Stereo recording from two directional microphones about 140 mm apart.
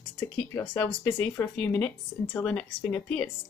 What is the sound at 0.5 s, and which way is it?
A woman's voice, 20° left (ahead or behind).